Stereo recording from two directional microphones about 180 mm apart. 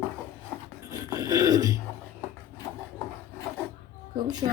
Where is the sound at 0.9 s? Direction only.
20° right (ahead or behind).